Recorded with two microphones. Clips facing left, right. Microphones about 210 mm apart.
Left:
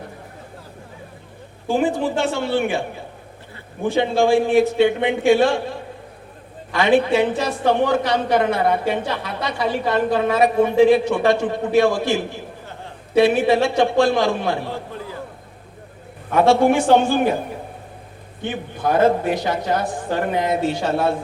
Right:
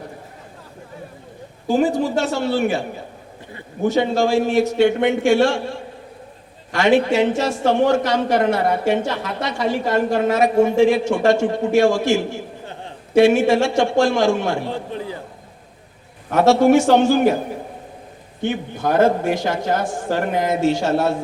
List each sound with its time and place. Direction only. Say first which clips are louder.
1.6 s a man's voice: right 2 dB; 40° right (ahead or behind)
3.8 s a man's voice: even; 40° right (ahead or behind)
6.7 s a man's voice: right 1 dB; 45° right (ahead or behind)
16.3 s a man's voice: right 2 dB; 45° right (ahead or behind)
18.4 s a man's voice: right 2 dB; 45° right (ahead or behind)